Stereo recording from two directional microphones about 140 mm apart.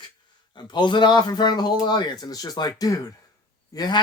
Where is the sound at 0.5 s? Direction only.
35° left (ahead or behind).